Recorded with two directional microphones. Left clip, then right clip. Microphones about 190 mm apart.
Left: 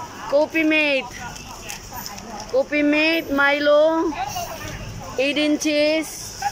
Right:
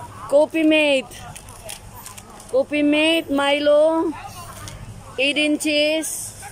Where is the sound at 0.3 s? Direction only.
15° right (ahead or behind).